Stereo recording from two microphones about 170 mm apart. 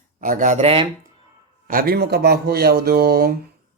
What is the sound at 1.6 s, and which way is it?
Speech, 60° right (ahead or behind).